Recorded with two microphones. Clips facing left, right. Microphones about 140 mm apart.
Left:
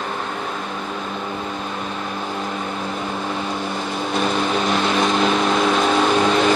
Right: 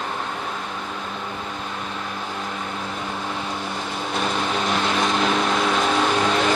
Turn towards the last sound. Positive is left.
turn(degrees=25)  # may be behind; listen again after turning